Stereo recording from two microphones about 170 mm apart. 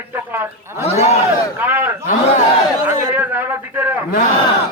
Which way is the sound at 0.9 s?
40° left (ahead or behind).